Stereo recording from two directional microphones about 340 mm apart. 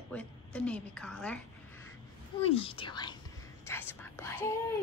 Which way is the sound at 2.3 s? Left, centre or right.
Centre.